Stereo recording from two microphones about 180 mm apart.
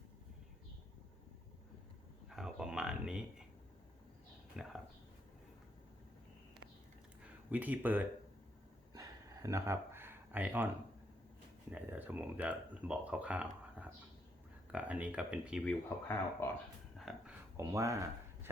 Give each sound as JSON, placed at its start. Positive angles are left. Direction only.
{"t": 2.3, "sound": "a sound", "side_deg": -5}
{"t": 4.6, "sound": "speech", "side_deg": -5}
{"t": 7.5, "sound": "speech", "side_deg": -10}
{"t": 8.9, "sound": "a sound", "side_deg": -20}
{"t": 11.7, "sound": "speech", "side_deg": -10}
{"t": 15.6, "sound": "speech", "side_deg": 10}
{"t": 17.0, "sound": "speech", "side_deg": 0}
{"t": 17.6, "sound": "speech", "side_deg": -20}